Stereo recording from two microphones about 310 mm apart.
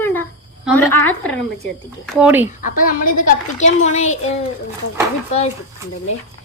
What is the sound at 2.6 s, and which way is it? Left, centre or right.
A woman's voice, left.